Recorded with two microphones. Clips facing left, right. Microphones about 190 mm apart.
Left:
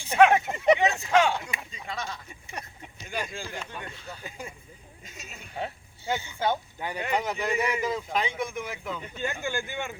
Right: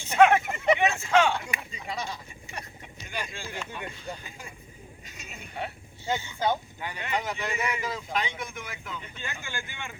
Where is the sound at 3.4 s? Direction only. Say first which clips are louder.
Right 1 dB; 10° right (ahead or behind).